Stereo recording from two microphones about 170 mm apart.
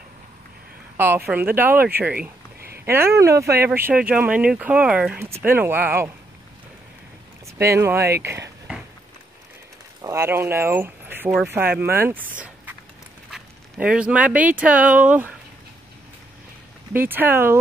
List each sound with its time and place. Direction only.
0.9 s speech: 10° right (ahead or behind)
7.5 s speech: 15° right (ahead or behind)
10.0 s speech: 15° right (ahead or behind)
16.9 s speech: 10° right (ahead or behind)